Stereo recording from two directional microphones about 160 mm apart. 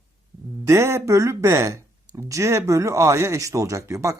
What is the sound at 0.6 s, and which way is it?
Speech, 15° right (ahead or behind).